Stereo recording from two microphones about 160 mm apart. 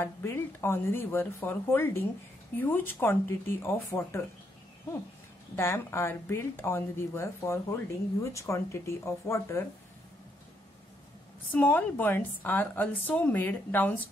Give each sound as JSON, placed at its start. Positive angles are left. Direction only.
{"t": 0.0, "sound": "speech", "side_deg": 15}
{"t": 5.6, "sound": "speech", "side_deg": 15}
{"t": 11.5, "sound": "speech", "side_deg": 10}